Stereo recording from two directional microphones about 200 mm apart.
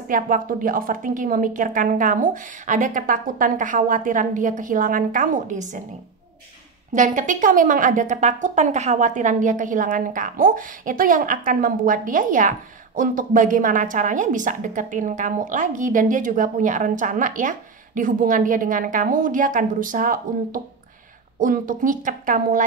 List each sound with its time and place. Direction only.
0.1 s a woman's voice: 40° right (ahead or behind)
6.9 s a woman's voice: 40° right (ahead or behind)